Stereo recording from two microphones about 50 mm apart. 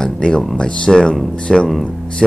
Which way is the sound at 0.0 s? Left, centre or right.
Centre.